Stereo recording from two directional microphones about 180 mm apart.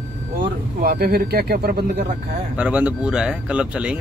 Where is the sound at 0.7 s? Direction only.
60° right (ahead or behind).